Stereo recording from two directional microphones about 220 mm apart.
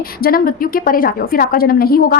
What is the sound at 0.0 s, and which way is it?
A woman's voice, 40° left (ahead or behind).